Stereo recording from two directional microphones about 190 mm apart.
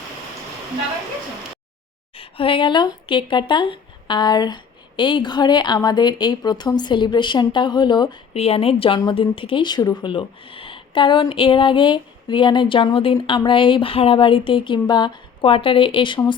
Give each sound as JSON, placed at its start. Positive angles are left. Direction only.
{"t": 2.1, "sound": "speech", "side_deg": 30}